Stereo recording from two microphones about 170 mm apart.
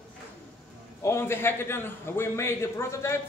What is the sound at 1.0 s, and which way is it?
A man's voice, 15° left (ahead or behind).